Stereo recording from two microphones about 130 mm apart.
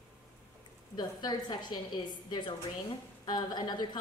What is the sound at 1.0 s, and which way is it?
A woman's voice, 30° left (ahead or behind).